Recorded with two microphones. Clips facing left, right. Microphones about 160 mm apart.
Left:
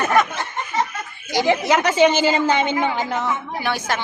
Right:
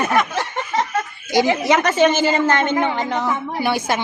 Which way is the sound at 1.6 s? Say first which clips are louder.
Even; 5° left (ahead or behind).